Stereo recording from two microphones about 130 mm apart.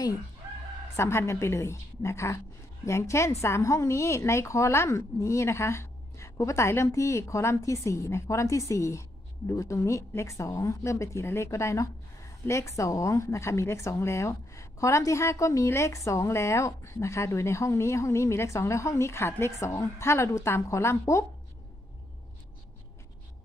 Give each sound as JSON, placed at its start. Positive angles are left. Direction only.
{"t": 0.9, "sound": "a woman's voice", "side_deg": 20}